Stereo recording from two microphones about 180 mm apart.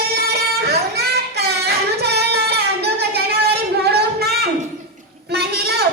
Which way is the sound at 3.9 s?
60° right (ahead or behind).